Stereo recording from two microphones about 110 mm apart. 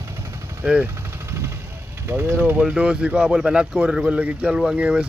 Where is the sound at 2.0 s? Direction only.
20° right (ahead or behind).